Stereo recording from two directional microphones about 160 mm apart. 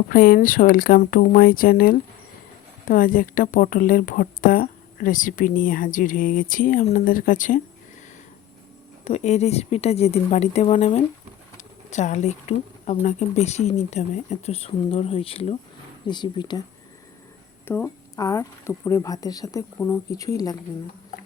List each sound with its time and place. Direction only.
0.1 s speech: 65° left (ahead or behind)
9.0 s speech: 45° left (ahead or behind); by 16.6 s 25° left (ahead or behind)
17.7 s speech: 15° left (ahead or behind)